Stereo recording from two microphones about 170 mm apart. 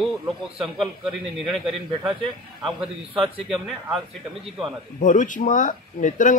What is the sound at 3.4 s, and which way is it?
Speech, centre (ahead or behind).